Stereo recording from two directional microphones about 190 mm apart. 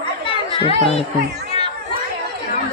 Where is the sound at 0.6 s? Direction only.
30° left (ahead or behind).